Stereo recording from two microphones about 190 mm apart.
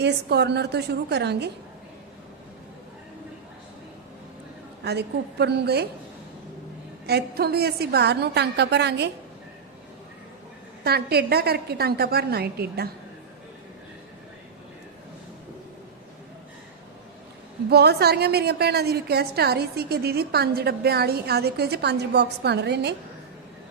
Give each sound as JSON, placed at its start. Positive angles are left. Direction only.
{"t": 0.0, "sound": "a woman's voice", "side_deg": -60}
{"t": 4.8, "sound": "a woman's voice", "side_deg": -60}
{"t": 7.1, "sound": "a woman's voice", "side_deg": -55}
{"t": 10.8, "sound": "a woman's voice", "side_deg": -55}
{"t": 17.7, "sound": "a woman's voice", "side_deg": -60}